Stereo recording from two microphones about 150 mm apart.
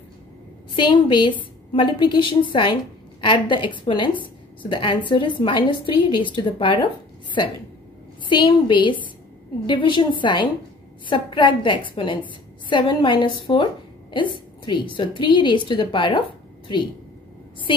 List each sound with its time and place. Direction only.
0.7 s a woman's voice: 35° left (ahead or behind)
8.3 s a woman's voice: 30° left (ahead or behind)
15.0 s a woman's voice: 35° left (ahead or behind)
17.7 s a woman's voice: 35° left (ahead or behind)